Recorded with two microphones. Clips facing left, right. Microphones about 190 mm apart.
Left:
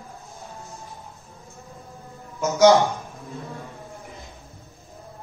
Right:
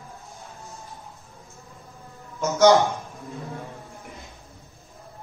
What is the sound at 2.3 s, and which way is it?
Speech, 10° left (ahead or behind).